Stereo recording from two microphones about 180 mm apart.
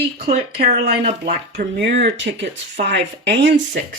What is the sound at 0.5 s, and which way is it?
Speech, 65° right (ahead or behind).